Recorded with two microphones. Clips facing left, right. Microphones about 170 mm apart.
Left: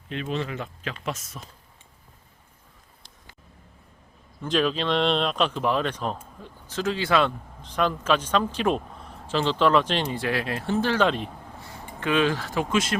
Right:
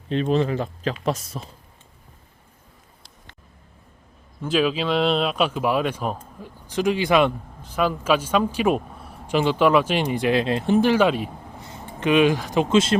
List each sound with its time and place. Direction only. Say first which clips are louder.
0.1 s speech: right 9 dB; 35° right (ahead or behind)
4.4 s speech: right 3 dB; 5° right (ahead or behind)
11.6 s a sound: right 3 dB; 20° right (ahead or behind)
11.9 s speech: right 5 dB; 20° right (ahead or behind)